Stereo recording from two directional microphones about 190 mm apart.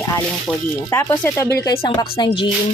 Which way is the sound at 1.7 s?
25° left (ahead or behind).